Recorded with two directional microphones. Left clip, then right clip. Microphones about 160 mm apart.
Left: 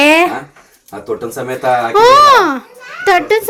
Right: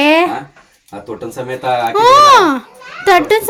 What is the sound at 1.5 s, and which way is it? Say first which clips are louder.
A child's voice: left 2 dB; centre (ahead or behind).